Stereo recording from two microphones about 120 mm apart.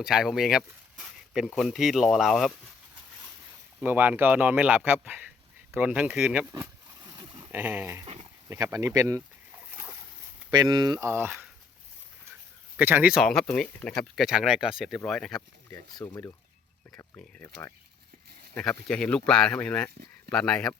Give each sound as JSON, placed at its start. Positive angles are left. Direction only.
{"t": 0.0, "sound": "speech", "side_deg": -5}
{"t": 3.8, "sound": "speech", "side_deg": -15}
{"t": 6.5, "sound": "a sound", "side_deg": -30}
{"t": 7.5, "sound": "speech", "side_deg": -15}
{"t": 8.0, "sound": "a sound", "side_deg": -55}
{"t": 8.4, "sound": "speech", "side_deg": -30}
{"t": 10.5, "sound": "speech", "side_deg": -35}
{"t": 11.1, "sound": "speech", "side_deg": -20}
{"t": 12.7, "sound": "speech", "side_deg": -15}
{"t": 13.2, "sound": "speech", "side_deg": 5}
{"t": 15.4, "sound": "speech", "side_deg": 25}
{"t": 17.4, "sound": "speech", "side_deg": 25}
{"t": 18.5, "sound": "speech", "side_deg": 5}